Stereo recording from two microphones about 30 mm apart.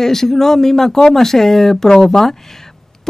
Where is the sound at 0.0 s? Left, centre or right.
Centre.